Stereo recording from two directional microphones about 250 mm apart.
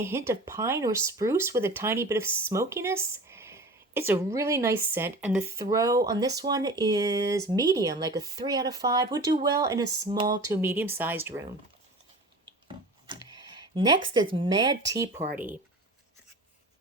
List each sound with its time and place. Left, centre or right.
0.0 s speech: centre
12.6 s a sound: centre
14.3 s speech: centre